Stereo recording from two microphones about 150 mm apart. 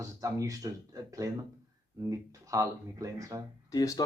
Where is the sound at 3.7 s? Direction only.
20° left (ahead or behind).